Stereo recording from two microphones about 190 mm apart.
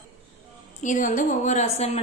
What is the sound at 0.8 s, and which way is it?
A woman's voice, 40° left (ahead or behind).